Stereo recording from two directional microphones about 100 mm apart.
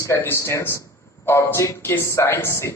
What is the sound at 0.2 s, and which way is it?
A man's voice, 25° left (ahead or behind).